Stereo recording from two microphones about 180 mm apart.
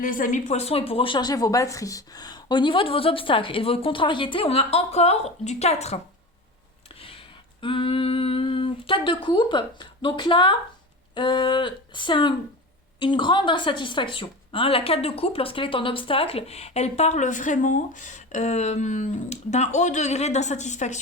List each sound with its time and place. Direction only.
0.0 s speech: 50° left (ahead or behind)
7.6 s speech: 30° left (ahead or behind)